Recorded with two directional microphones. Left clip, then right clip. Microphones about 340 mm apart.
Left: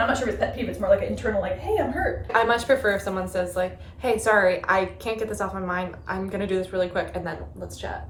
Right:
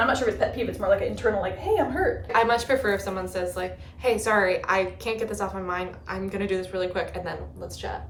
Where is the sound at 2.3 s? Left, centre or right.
Centre.